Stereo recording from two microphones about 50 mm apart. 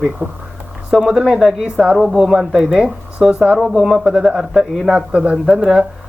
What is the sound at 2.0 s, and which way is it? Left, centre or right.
Speech, centre.